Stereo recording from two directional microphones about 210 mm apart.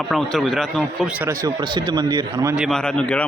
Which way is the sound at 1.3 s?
20° right (ahead or behind).